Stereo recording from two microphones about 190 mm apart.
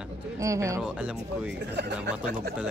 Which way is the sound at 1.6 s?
60° right (ahead or behind).